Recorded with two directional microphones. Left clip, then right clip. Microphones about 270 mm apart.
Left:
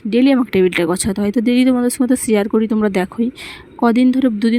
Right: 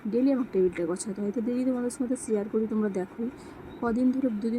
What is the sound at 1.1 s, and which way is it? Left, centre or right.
Speech, left.